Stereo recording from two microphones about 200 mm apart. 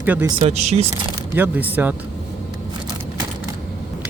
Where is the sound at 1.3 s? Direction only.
10° right (ahead or behind).